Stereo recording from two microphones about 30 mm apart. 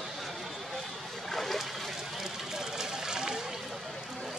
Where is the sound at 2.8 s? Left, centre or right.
Right.